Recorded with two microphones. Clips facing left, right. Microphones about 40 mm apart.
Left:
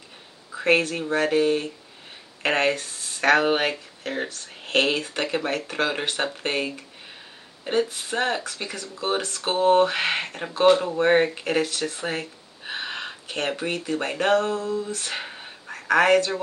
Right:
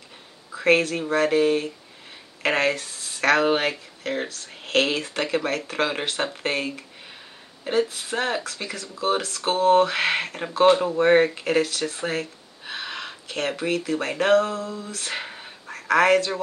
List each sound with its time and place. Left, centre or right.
0.5 s speech: centre
10.6 s speech: centre
10.9 s speech: centre
12.6 s a sound: left
14.1 s speech: centre
15.7 s speech: centre